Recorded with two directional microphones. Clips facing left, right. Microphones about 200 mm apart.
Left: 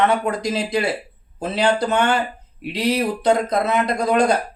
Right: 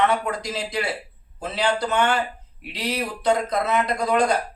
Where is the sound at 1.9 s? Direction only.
20° left (ahead or behind).